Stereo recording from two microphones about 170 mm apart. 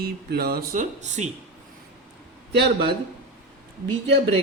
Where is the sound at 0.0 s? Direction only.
65° right (ahead or behind); by 1.3 s 45° right (ahead or behind).